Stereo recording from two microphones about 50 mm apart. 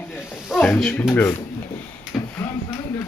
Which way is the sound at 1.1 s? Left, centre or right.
Left.